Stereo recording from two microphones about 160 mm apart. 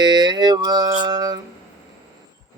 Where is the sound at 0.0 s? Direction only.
25° right (ahead or behind).